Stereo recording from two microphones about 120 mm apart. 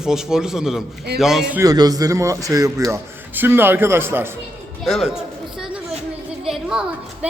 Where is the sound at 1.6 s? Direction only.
30° right (ahead or behind).